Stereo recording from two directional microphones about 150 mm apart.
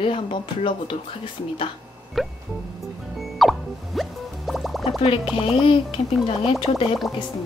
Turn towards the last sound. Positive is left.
turn(degrees=35)  # may be behind; listen again after turning